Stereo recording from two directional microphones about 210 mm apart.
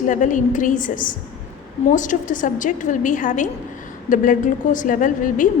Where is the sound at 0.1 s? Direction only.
35° left (ahead or behind).